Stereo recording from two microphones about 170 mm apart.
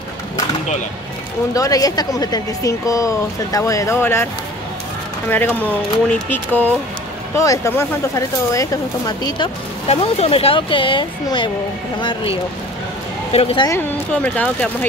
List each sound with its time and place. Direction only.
1.5 s speech: 20° left (ahead or behind)
5.3 s speech: 10° left (ahead or behind)
9.8 s speech: 35° left (ahead or behind)
14.2 s speech: 5° left (ahead or behind)